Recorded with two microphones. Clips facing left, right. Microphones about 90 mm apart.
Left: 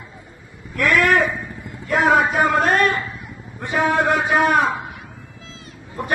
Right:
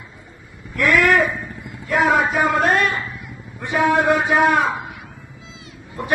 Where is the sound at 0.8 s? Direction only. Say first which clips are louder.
Right 1 dB; 50° left (ahead or behind).